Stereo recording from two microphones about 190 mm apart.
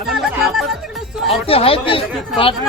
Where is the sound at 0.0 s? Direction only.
Centre (ahead or behind).